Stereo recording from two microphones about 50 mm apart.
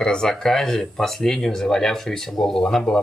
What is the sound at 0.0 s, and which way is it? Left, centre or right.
Speech, centre.